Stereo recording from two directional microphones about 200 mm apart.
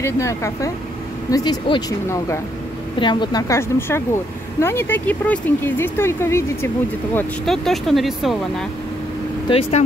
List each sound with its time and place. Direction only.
0.0 s speech: 15° left (ahead or behind)
7.2 s speech: centre (ahead or behind)
9.5 s speech: 30° left (ahead or behind)